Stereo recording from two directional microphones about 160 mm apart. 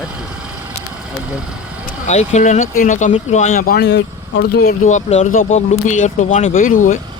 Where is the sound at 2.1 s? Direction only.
45° left (ahead or behind).